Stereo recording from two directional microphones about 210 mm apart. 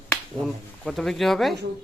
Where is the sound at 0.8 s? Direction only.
Centre (ahead or behind).